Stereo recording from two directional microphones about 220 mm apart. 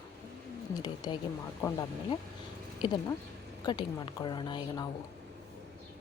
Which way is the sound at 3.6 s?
20° left (ahead or behind).